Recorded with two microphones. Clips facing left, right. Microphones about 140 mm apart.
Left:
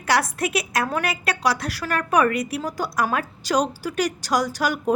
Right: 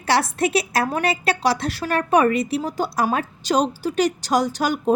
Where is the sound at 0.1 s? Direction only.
25° right (ahead or behind).